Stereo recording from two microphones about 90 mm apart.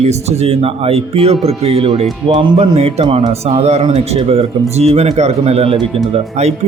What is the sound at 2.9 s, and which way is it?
Speech, 80° right.